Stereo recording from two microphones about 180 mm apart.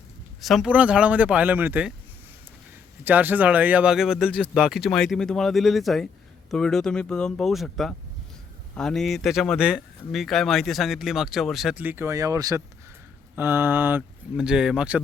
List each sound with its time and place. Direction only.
0.4 s speech: centre (ahead or behind)
3.0 s speech: 10° right (ahead or behind)